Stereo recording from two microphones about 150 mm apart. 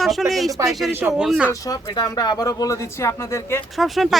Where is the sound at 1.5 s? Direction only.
25° left (ahead or behind).